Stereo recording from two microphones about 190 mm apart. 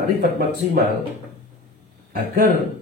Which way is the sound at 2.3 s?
50° right (ahead or behind).